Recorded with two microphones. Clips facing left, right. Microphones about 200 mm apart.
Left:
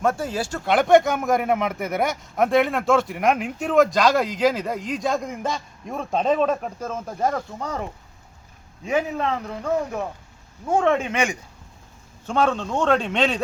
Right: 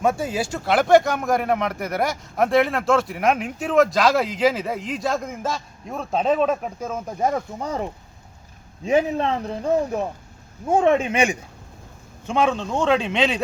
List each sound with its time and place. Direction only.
0.0 s a man's voice: 10° right (ahead or behind)
12.3 s speech: 10° right (ahead or behind)